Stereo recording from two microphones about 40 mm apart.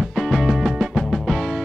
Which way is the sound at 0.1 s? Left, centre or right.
Centre.